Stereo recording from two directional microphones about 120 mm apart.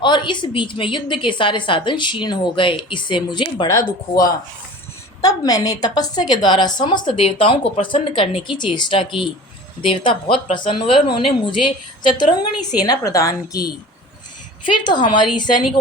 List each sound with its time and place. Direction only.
0.0 s a woman's voice: 40° left (ahead or behind)
14.6 s a woman's voice: 40° left (ahead or behind)